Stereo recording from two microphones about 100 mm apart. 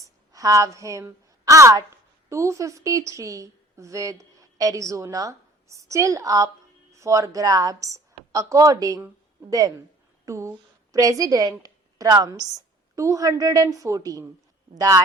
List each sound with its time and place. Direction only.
0.0 s a woman's voice: 35° right (ahead or behind)